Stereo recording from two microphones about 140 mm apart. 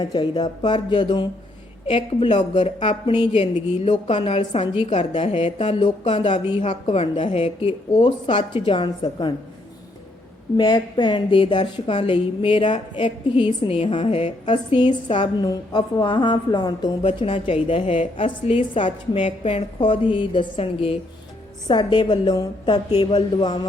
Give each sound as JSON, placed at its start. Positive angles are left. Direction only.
{"t": 0.0, "sound": "a woman's voice", "side_deg": 30}
{"t": 10.6, "sound": "a woman's voice", "side_deg": 30}